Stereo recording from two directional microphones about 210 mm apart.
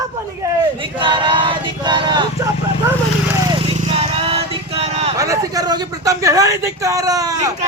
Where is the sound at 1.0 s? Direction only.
25° right (ahead or behind).